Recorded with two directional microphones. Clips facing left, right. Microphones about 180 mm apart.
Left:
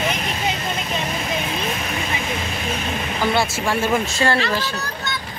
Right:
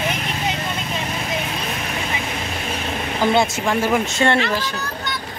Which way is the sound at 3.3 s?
20° right (ahead or behind).